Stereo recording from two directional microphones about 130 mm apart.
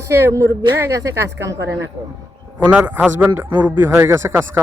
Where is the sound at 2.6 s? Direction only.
10° right (ahead or behind).